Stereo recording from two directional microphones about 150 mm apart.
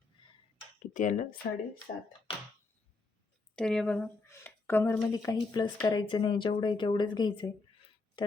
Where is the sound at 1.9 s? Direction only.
90° left.